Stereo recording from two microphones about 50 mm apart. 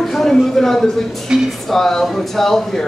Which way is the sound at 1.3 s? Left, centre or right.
Centre.